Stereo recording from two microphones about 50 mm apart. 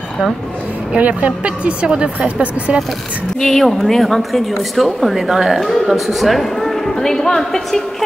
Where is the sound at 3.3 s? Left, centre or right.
Centre.